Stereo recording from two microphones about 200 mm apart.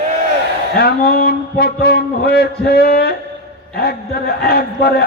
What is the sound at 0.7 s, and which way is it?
A man's voice, 50° left (ahead or behind).